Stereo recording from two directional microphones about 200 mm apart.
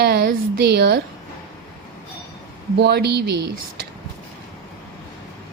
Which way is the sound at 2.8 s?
55° right (ahead or behind).